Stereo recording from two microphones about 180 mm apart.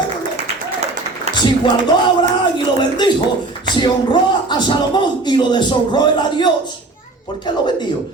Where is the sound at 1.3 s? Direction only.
35° right (ahead or behind).